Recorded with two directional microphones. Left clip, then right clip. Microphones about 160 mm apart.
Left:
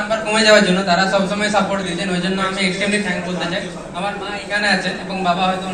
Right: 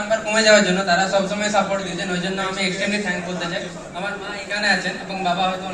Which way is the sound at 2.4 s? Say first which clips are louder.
Left 4 dB; 15° right (ahead or behind).